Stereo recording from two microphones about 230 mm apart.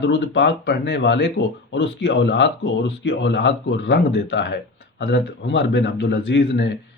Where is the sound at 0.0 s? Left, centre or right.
Left.